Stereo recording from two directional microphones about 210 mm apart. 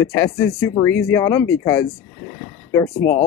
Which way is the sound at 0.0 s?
15° left (ahead or behind).